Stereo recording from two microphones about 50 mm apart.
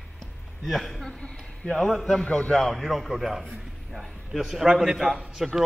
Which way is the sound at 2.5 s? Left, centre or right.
Centre.